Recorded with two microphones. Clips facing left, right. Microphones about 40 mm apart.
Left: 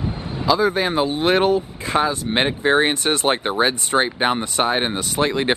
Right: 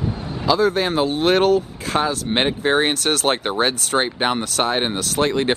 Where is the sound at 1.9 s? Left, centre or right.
Centre.